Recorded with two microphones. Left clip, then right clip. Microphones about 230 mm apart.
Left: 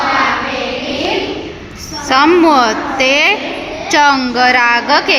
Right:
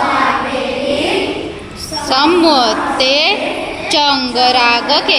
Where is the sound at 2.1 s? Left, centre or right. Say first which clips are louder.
Left 2 dB; left.